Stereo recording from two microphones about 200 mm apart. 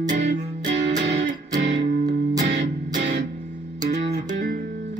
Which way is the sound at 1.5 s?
35° right (ahead or behind).